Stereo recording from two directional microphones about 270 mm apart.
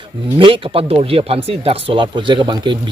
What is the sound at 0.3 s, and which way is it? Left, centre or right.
A man's voice, centre.